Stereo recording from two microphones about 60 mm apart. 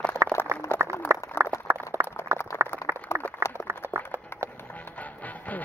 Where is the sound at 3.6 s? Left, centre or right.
Right.